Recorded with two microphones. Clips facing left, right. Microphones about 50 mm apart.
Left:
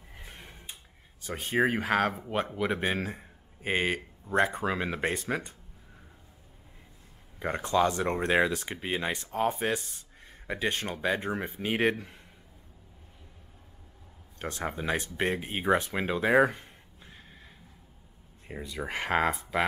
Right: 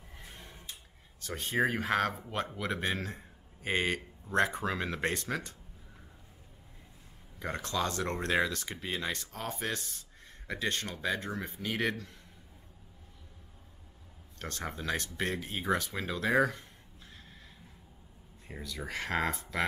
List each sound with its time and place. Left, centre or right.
0.1 s a sound: left
1.2 s speech: centre
7.3 s speech: left
14.4 s speech: centre
18.5 s speech: left